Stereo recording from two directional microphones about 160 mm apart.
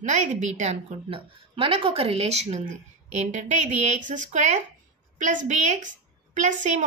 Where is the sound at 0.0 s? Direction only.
50° right (ahead or behind).